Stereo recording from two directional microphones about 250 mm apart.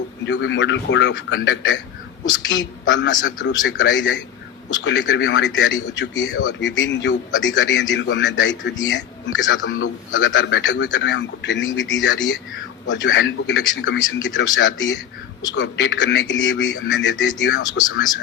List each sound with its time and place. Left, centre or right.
0.3 s a man's voice: left